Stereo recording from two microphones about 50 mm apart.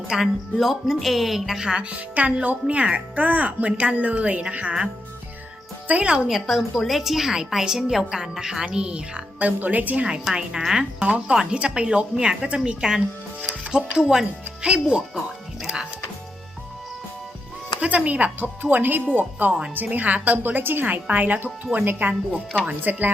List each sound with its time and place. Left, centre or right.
0.1 s a woman's voice: centre
0.5 s music: centre
1.0 s a woman's voice: centre; by 4.9 s right
5.9 s a woman's voice: right
6.2 s a woman's voice: centre
9.4 s a woman's voice: right
10.6 s a woman's voice: centre
17.7 s a woman's voice: right